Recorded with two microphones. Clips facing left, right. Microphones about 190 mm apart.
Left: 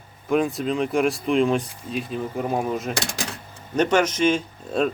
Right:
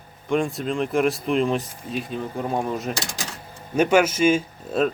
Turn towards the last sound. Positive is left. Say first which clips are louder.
# right 1 dB
turn(degrees=-5)  # may be behind; listen again after turning